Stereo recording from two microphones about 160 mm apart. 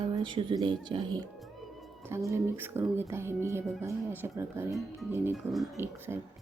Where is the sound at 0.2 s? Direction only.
30° right (ahead or behind).